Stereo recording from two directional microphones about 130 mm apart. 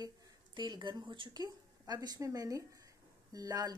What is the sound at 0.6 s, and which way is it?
A woman's voice, 35° right (ahead or behind).